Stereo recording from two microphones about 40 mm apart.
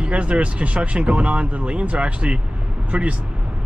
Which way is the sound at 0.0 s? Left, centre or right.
Right.